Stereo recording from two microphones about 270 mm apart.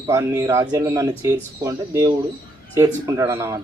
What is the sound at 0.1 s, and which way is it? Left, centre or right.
A man's voice, centre.